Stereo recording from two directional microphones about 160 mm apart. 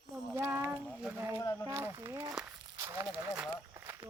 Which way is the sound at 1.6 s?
15° right (ahead or behind).